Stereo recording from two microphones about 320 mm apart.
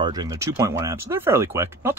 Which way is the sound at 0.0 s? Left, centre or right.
Centre.